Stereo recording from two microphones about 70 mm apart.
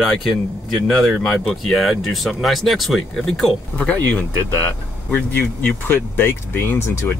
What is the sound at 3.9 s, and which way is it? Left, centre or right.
Speech, centre.